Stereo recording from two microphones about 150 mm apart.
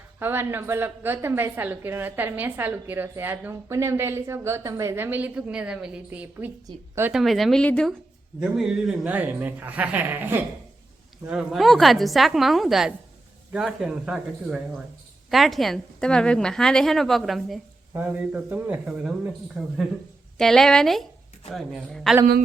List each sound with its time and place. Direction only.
0.2 s a woman's voice: 15° right (ahead or behind)
7.1 s a woman's voice: centre (ahead or behind)
8.4 s a woman's voice: 5° right (ahead or behind)
17.9 s a woman's voice: 10° right (ahead or behind)